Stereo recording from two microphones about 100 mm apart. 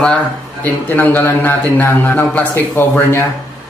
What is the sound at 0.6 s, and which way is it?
A man's voice, 15° left (ahead or behind).